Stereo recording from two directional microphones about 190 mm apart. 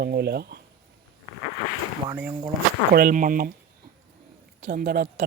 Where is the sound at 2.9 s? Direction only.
50° right (ahead or behind).